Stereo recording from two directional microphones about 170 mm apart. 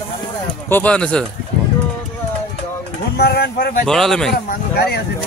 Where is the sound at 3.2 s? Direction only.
70° left (ahead or behind).